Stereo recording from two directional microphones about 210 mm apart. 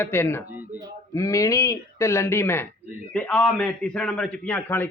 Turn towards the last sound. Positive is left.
turn(degrees=5)  # may be behind; listen again after turning